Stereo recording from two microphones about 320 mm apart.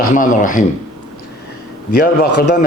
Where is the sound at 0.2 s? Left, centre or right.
Left.